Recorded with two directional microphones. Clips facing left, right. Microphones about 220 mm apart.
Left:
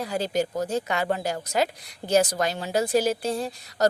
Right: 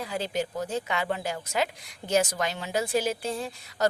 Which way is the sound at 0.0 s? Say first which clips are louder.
Left 4 dB; 40° left (ahead or behind).